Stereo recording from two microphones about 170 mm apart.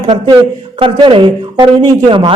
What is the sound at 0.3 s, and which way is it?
A man's voice, 30° right (ahead or behind).